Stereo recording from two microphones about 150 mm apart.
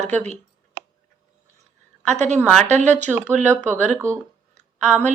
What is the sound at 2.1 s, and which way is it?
Speech, 50° right (ahead or behind).